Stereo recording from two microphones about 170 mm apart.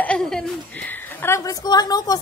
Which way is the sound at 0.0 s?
5° left (ahead or behind).